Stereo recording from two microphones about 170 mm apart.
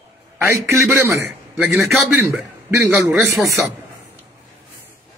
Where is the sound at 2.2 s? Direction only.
10° right (ahead or behind).